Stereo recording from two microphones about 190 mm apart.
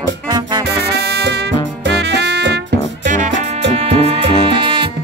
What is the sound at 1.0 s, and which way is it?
Music, 60° right (ahead or behind).